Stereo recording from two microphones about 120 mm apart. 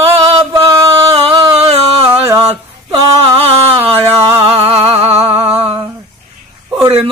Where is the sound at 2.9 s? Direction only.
50° right (ahead or behind).